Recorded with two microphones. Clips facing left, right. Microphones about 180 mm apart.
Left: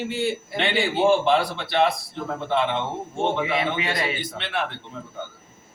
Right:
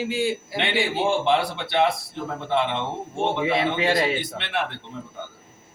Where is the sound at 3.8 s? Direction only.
20° right (ahead or behind).